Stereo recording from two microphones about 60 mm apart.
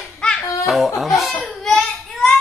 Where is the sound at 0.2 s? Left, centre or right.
Centre.